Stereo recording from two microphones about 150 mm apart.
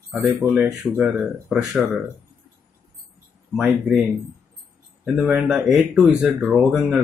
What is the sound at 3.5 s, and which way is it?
Speech, 5° right (ahead or behind).